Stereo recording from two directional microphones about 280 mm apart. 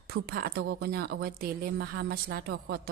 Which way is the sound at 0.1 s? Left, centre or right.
Right.